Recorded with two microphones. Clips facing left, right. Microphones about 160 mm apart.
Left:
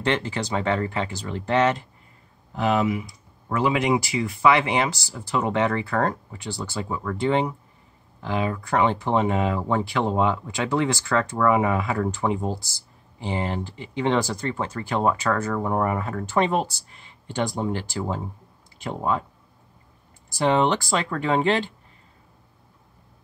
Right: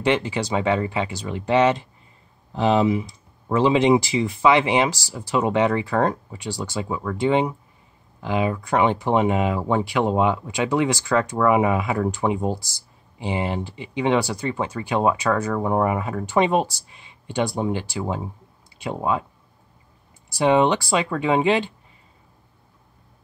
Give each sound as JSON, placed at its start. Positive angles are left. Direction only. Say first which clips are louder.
{"t": 0.0, "sound": "speech", "louder": "right 3 dB", "side_deg": -15}
{"t": 20.3, "sound": "speech", "louder": "right 3 dB", "side_deg": -15}